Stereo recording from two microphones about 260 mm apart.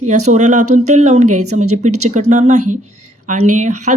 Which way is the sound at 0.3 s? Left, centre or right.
Right.